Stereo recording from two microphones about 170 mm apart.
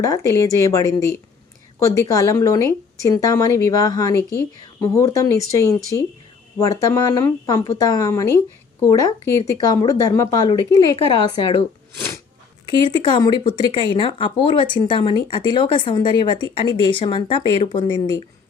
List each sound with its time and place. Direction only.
0.0 s speech: 20° left (ahead or behind)
12.8 s speech: 25° left (ahead or behind)